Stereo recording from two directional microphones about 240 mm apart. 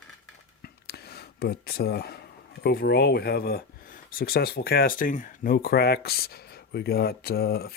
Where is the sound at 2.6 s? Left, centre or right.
Left.